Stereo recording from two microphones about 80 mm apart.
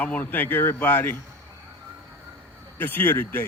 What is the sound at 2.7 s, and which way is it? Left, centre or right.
Speech, left.